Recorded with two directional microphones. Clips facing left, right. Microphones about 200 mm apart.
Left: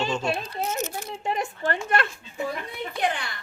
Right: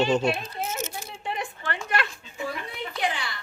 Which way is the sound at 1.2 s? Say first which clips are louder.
Left 5 dB; 40° left (ahead or behind).